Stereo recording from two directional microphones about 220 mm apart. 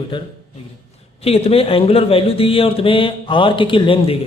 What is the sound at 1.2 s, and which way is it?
A man's voice, 25° left (ahead or behind).